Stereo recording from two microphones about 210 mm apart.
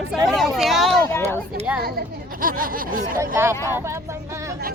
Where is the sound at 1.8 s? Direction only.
45° right (ahead or behind).